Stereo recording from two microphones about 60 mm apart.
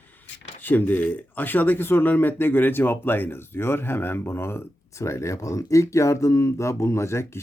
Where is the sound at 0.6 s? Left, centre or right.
Left.